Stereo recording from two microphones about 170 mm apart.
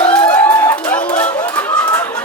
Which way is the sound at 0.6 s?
10° left (ahead or behind).